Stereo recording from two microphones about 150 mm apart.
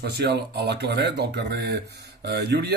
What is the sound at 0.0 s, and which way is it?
Speech, 90° right.